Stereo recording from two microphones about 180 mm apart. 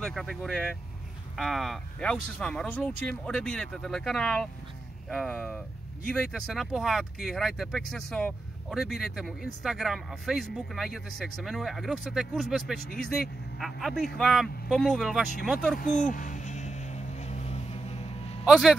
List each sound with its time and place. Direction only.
0.0 s speech: centre (ahead or behind)
15.8 s vehicle: 45° left (ahead or behind)
18.4 s a man's voice: centre (ahead or behind)